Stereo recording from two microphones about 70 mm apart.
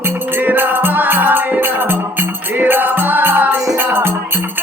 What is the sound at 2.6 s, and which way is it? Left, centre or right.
Music, right.